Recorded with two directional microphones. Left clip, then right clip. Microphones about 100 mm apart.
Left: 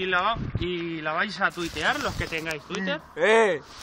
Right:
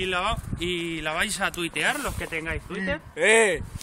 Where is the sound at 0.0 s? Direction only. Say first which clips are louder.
Left 2 dB; 40° right (ahead or behind).